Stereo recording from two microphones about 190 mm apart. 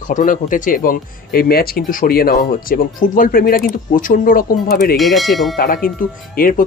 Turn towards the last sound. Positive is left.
turn(degrees=45)  # may be behind; listen again after turning